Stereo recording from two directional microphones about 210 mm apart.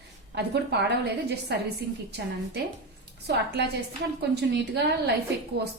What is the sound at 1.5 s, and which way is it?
Speech, 55° right (ahead or behind).